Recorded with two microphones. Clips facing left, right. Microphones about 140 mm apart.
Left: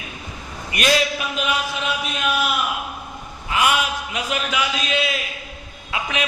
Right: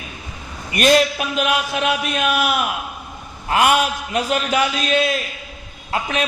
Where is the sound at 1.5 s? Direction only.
65° right (ahead or behind).